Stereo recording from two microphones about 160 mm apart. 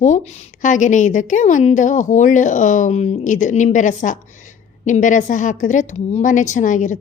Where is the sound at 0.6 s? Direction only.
50° left (ahead or behind).